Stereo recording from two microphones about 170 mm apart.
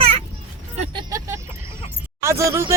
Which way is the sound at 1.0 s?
20° right (ahead or behind).